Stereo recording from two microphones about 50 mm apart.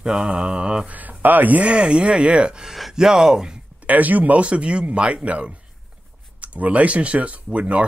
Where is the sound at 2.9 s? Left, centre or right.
Centre.